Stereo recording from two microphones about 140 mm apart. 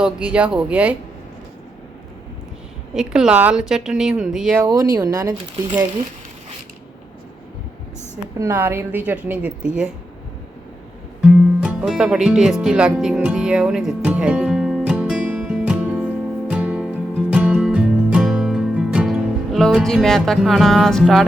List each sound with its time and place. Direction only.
0.0 s a woman's voice: 10° right (ahead or behind)
2.9 s a woman's voice: 5° right (ahead or behind)
4.6 s speech: 25° right (ahead or behind)
8.4 s a woman's voice: 15° right (ahead or behind)
11.2 s music: 5° right (ahead or behind)